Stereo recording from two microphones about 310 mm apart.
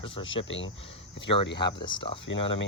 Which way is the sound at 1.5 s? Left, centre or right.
Centre.